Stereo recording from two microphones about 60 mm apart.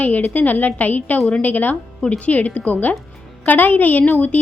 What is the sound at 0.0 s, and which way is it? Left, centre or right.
A woman's voice, left.